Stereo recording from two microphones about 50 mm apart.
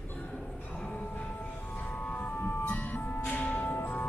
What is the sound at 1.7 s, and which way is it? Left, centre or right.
Vehicle, left.